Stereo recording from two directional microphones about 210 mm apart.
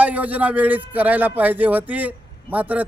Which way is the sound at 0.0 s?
5° right (ahead or behind).